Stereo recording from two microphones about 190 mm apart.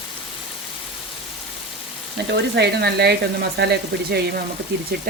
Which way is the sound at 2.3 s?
60° right (ahead or behind).